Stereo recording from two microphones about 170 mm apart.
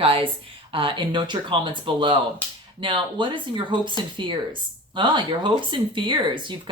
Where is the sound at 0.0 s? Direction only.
30° right (ahead or behind).